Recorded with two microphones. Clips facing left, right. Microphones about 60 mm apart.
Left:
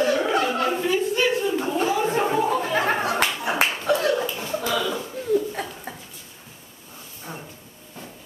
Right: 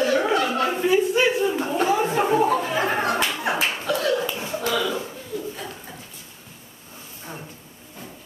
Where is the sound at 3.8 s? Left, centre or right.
Left.